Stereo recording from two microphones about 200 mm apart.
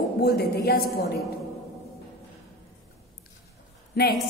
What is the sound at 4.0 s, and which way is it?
Speech, 55° left (ahead or behind).